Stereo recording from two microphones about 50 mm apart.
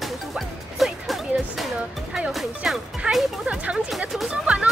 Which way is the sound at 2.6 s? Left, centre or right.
Centre.